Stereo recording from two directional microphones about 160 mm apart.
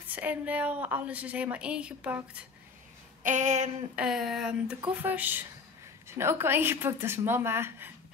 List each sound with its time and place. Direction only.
0.1 s a woman's voice: 10° right (ahead or behind)
3.3 s a sound: 50° right (ahead or behind)
3.9 s a woman's voice: 5° right (ahead or behind)